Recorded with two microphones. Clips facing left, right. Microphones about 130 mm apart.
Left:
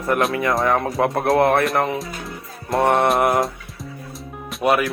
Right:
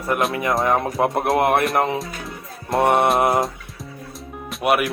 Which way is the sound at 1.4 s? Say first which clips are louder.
Left 2 dB; 20° right (ahead or behind).